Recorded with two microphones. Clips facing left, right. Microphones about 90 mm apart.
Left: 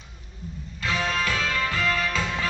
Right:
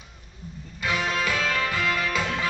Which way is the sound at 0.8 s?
15° right (ahead or behind).